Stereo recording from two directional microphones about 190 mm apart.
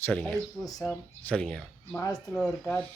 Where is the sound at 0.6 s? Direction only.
20° left (ahead or behind).